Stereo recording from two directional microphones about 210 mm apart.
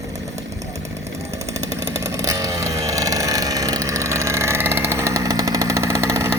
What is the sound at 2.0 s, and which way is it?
Vehicle, 15° right (ahead or behind).